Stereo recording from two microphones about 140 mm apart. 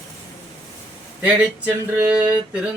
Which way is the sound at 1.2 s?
10° right (ahead or behind).